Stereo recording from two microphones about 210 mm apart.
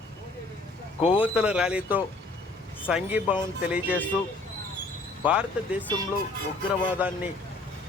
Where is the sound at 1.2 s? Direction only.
5° right (ahead or behind).